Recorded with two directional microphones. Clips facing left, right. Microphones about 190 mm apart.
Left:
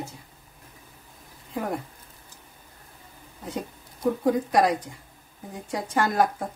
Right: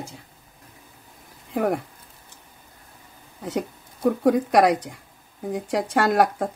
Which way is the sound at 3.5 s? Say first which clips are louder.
Right 6 dB; 70° right (ahead or behind).